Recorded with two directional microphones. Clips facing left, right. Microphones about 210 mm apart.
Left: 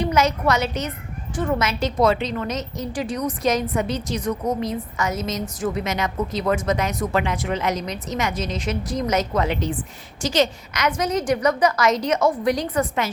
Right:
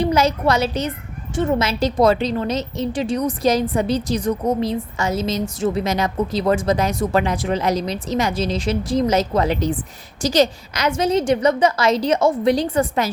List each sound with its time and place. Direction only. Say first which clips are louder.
0.0 s a woman's voice: right 3 dB; 30° right (ahead or behind)